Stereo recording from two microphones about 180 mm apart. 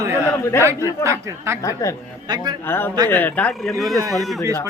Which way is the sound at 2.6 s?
10° left (ahead or behind).